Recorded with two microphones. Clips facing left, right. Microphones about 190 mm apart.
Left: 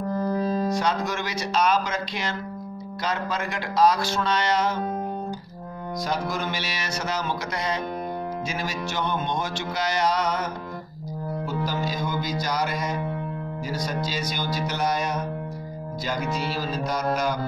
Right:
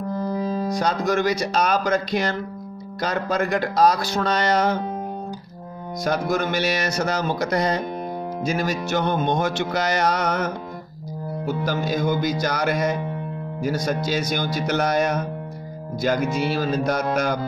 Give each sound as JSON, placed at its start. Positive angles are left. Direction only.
{"t": 0.3, "sound": "music", "side_deg": -15}
{"t": 0.7, "sound": "speech", "side_deg": -40}
{"t": 6.0, "sound": "music", "side_deg": -50}
{"t": 16.4, "sound": "music", "side_deg": -55}